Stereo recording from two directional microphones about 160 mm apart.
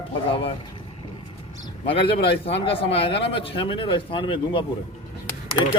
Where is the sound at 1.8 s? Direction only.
35° left (ahead or behind).